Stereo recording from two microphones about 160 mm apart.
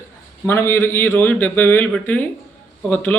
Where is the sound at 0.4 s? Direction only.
15° left (ahead or behind).